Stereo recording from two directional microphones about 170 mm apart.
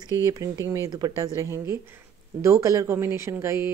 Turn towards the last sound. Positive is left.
turn(degrees=-15)  # may be behind; listen again after turning